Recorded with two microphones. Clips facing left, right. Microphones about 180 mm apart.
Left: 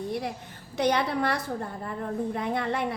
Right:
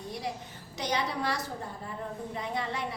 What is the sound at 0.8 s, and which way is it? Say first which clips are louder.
A woman's voice: left 7 dB; 60° left (ahead or behind).